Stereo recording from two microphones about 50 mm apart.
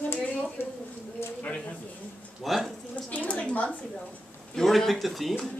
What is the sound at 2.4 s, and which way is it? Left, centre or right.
Speech, centre.